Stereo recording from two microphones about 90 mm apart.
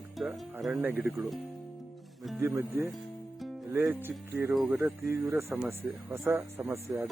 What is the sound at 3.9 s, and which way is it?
Speech, 25° right (ahead or behind).